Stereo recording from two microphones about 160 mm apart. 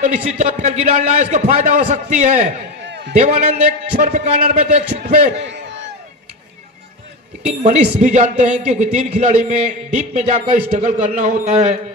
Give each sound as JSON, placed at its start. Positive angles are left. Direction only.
{"t": 0.0, "sound": "a man's voice", "side_deg": -50}
{"t": 2.8, "sound": "a sound", "side_deg": -90}
{"t": 3.2, "sound": "a man's voice", "side_deg": -60}
{"t": 8.0, "sound": "a man's voice", "side_deg": -50}